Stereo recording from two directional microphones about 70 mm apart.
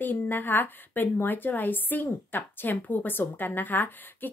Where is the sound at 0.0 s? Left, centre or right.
Left.